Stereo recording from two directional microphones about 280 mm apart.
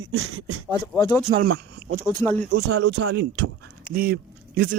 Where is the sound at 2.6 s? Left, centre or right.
Right.